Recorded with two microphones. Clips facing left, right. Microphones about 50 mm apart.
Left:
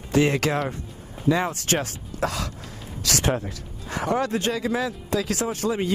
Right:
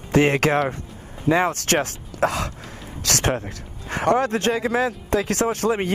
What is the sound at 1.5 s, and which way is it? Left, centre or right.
Speech, right.